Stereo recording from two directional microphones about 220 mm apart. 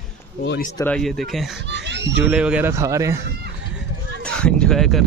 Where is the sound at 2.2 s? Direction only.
5° right (ahead or behind).